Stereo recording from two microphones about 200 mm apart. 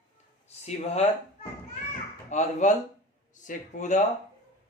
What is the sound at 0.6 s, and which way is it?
Speech, 30° left (ahead or behind).